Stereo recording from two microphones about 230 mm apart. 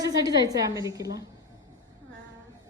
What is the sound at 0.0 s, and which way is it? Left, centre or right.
Speech, centre.